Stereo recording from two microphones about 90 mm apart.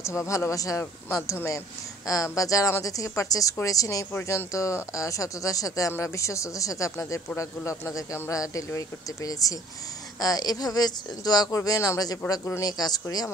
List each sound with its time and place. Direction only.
0.0 s speech: 35° left (ahead or behind)
4.1 s speech: 25° left (ahead or behind); by 13.0 s 45° left (ahead or behind)